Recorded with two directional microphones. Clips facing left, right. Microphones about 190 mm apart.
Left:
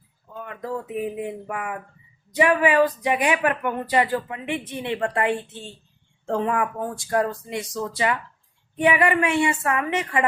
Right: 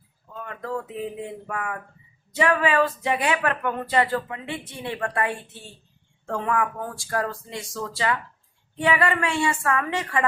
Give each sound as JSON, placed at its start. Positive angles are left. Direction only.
{"t": 0.3, "sound": "speech", "side_deg": 15}